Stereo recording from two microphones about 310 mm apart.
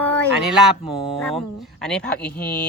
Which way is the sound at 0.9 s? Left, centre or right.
Centre.